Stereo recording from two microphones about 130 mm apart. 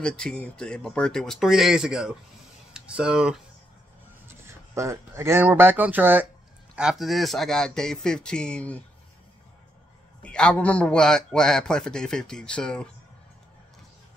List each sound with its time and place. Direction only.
0.0 s a man's voice: 5° left (ahead or behind)
4.3 s a man's voice: 20° right (ahead or behind); by 8.8 s 10° left (ahead or behind)
10.2 s a man's voice: 5° left (ahead or behind)